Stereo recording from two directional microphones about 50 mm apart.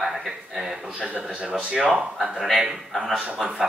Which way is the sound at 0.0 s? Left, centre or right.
Centre.